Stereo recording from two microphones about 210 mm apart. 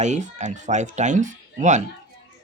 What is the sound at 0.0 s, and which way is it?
Speech, 35° right (ahead or behind).